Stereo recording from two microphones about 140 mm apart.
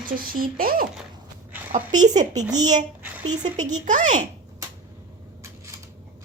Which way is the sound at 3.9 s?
65° right (ahead or behind).